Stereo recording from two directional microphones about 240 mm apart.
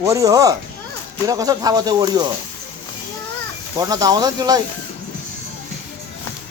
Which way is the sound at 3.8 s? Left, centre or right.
Centre.